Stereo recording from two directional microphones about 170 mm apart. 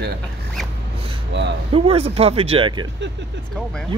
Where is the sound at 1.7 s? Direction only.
35° right (ahead or behind).